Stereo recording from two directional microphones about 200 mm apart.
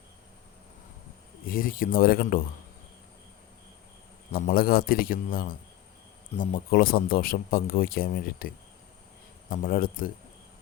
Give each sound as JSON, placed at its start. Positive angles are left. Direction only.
{"t": 1.5, "sound": "speech", "side_deg": 45}
{"t": 4.3, "sound": "speech", "side_deg": 45}
{"t": 9.5, "sound": "speech", "side_deg": 45}